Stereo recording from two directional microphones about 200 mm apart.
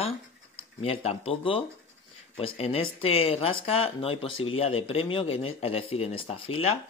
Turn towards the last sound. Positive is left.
turn(degrees=30)  # may be behind; listen again after turning